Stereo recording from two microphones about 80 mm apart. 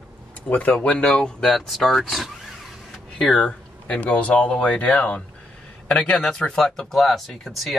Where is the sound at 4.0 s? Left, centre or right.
Centre.